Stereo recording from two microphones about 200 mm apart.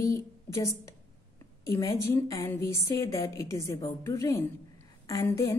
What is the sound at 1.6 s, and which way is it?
A woman's voice, 15° left (ahead or behind).